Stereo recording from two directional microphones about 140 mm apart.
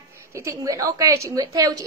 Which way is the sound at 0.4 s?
20° right (ahead or behind).